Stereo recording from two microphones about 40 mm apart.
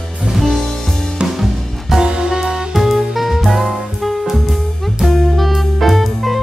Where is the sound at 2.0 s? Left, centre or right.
Centre.